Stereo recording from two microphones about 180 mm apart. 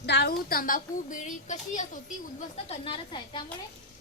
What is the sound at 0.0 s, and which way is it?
Speech, 65° left (ahead or behind).